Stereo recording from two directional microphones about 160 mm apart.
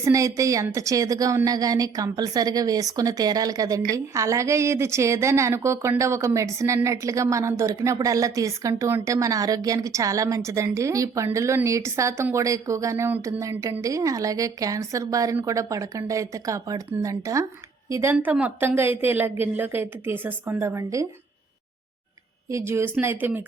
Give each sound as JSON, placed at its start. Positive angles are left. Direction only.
{"t": 0.0, "sound": "a woman's voice", "side_deg": -20}
{"t": 22.4, "sound": "a woman's voice", "side_deg": -15}